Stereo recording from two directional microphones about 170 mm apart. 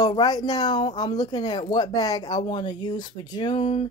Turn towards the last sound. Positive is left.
turn(degrees=30)  # may be behind; listen again after turning